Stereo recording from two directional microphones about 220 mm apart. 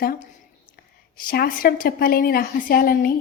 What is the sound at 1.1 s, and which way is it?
A woman's voice, 40° left (ahead or behind).